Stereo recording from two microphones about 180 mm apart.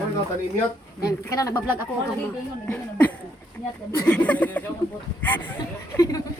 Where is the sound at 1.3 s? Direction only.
20° left (ahead or behind).